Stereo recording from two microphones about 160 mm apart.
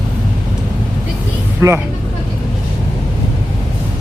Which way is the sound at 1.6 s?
15° right (ahead or behind).